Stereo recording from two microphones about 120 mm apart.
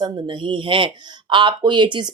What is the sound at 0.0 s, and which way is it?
Speech, 40° right (ahead or behind).